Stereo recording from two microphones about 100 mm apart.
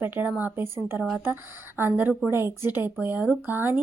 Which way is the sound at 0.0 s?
20° right (ahead or behind).